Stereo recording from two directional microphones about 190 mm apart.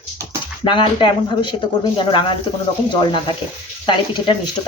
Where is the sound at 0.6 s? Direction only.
25° left (ahead or behind).